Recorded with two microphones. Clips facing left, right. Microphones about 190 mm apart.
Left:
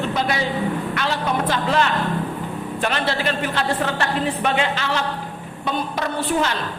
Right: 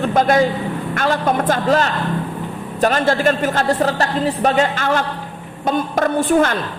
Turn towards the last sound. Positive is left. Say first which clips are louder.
# right 7 dB
turn(degrees=-50)  # may be behind; listen again after turning